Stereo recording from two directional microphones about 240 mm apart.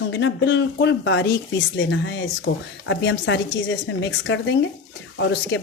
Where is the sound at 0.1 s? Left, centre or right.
Left.